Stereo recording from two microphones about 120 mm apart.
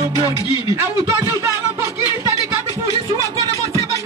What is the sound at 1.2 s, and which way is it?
Speech, 25° right (ahead or behind).